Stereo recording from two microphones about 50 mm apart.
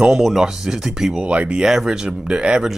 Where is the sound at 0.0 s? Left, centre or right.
Centre.